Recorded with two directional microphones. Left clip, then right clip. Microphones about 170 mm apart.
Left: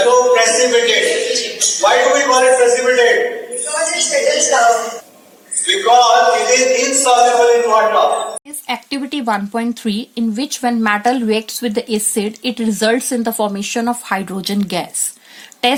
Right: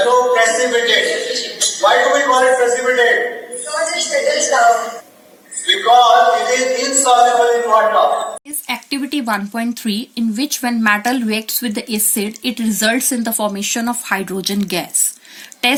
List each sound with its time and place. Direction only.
0.0 s a sound: 10° left (ahead or behind)
5.6 s speech: 10° left (ahead or behind)
8.6 s a woman's voice: 60° left (ahead or behind)